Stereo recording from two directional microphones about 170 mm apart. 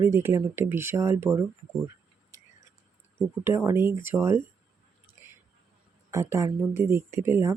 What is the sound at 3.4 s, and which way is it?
Speech, 15° right (ahead or behind).